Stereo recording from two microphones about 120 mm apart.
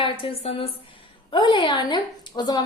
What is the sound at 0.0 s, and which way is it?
Speech, 50° left (ahead or behind).